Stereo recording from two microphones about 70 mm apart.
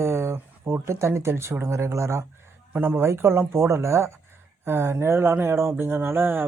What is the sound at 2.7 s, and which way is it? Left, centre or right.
Speech, right.